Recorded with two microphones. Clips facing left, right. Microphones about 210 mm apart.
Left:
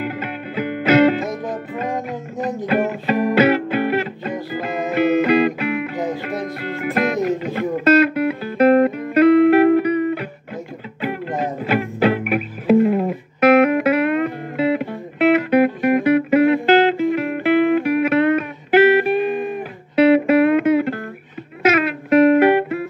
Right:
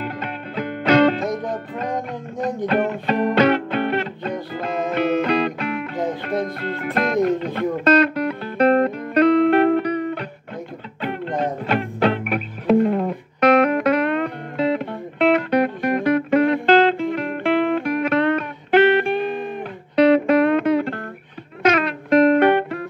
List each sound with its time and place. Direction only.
0.0 s music: 5° left (ahead or behind)